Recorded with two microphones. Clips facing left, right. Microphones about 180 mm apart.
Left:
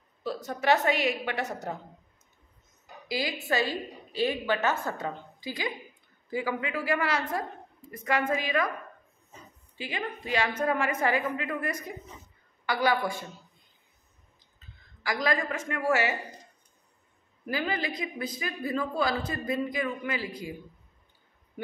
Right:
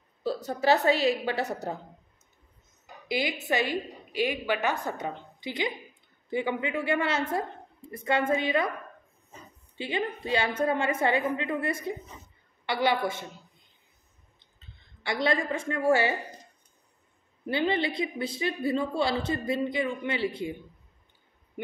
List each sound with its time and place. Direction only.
0.2 s a woman's voice: 30° right (ahead or behind)
3.1 s a woman's voice: 20° right (ahead or behind)
9.8 s speech: 30° right (ahead or behind)
15.0 s speech: 30° right (ahead or behind)
17.5 s speech: 30° right (ahead or behind)